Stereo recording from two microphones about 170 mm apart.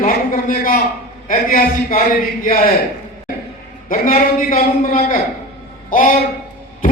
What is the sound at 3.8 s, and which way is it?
A man's voice, 55° left (ahead or behind).